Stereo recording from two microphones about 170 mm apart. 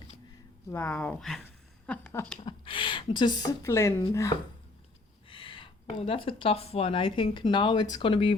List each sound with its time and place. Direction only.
0.7 s speech: 10° left (ahead or behind)
2.4 s speech: 30° left (ahead or behind)
5.3 s speech: 30° left (ahead or behind)